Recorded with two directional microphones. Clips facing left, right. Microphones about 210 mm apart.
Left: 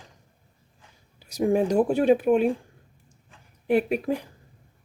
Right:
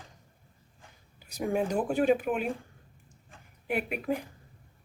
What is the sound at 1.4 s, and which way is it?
Speech, 40° left (ahead or behind).